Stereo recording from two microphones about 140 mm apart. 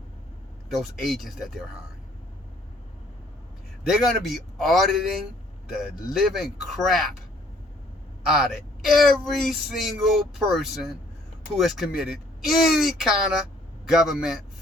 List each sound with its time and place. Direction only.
0.8 s speech: centre (ahead or behind)
3.8 s speech: centre (ahead or behind)
8.3 s speech: centre (ahead or behind)